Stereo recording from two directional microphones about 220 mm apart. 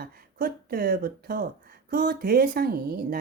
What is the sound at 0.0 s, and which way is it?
Speech, 45° right (ahead or behind).